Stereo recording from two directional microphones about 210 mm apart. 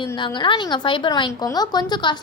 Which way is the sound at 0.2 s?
20° left (ahead or behind).